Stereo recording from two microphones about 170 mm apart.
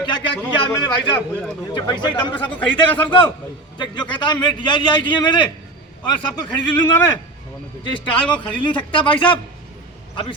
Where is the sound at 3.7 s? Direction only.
25° left (ahead or behind).